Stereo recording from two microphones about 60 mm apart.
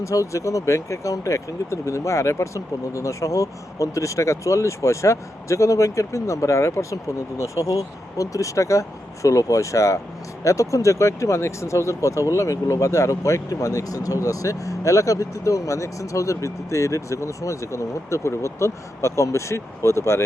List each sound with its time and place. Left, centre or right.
0.0 s speech: left